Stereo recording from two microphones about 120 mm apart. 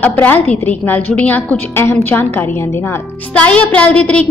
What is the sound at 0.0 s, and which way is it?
A woman's voice, 15° left (ahead or behind).